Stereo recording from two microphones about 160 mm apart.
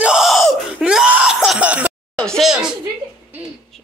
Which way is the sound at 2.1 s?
5° left (ahead or behind).